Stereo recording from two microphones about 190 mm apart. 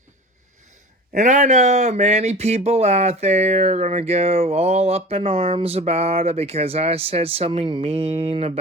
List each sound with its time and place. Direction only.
1.1 s speech: 40° right (ahead or behind)